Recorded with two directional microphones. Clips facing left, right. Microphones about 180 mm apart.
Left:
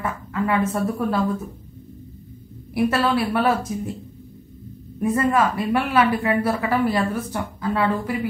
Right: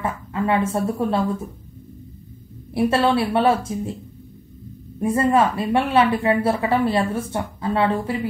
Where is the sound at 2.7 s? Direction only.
30° right (ahead or behind).